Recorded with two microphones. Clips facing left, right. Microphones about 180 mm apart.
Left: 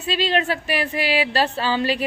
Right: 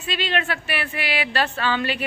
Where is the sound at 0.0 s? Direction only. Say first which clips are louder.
Left 4 dB; 35° left (ahead or behind).